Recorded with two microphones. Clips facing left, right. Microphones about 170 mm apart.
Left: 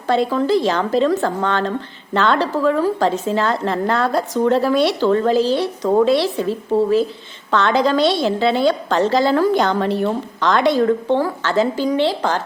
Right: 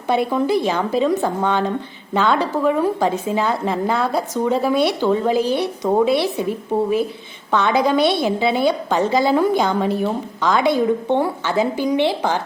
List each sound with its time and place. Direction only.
0.1 s a woman's voice: 15° right (ahead or behind)
2.6 s a woman's voice: 20° right (ahead or behind)